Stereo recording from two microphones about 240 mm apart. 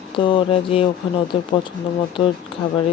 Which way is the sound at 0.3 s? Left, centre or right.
Left.